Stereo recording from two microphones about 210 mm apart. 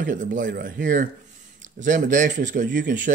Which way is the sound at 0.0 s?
35° right (ahead or behind).